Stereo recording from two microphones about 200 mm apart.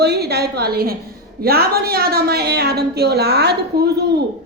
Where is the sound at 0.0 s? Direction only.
55° right (ahead or behind).